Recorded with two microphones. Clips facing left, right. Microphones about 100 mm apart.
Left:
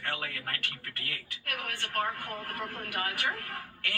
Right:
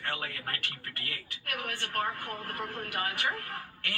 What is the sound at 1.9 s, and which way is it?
A woman's voice, 15° right (ahead or behind).